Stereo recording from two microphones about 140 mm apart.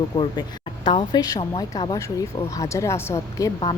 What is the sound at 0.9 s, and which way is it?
A woman's voice, 30° left (ahead or behind).